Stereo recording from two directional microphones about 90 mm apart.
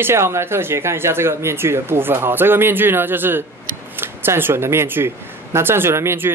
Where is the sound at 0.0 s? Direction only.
30° right (ahead or behind).